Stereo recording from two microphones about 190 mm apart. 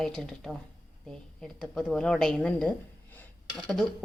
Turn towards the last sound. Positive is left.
turn(degrees=5)  # may be behind; listen again after turning